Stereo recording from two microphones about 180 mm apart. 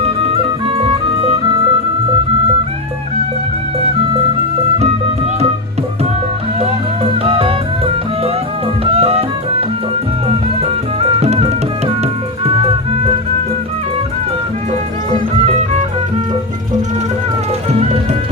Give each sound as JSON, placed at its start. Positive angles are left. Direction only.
{"t": 7.3, "sound": "music", "side_deg": -30}
{"t": 8.8, "sound": "music", "side_deg": -35}